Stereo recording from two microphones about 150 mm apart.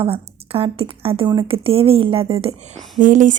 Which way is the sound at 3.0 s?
60° right (ahead or behind).